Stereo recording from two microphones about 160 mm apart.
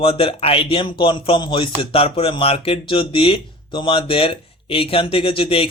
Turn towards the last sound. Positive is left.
turn(degrees=35)  # may be behind; listen again after turning